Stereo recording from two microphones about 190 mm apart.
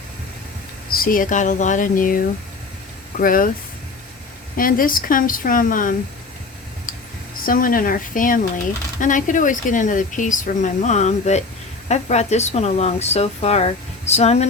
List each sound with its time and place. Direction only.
0.9 s speech: 50° left (ahead or behind)
4.5 s speech: 45° left (ahead or behind)
7.4 s speech: 45° left (ahead or behind)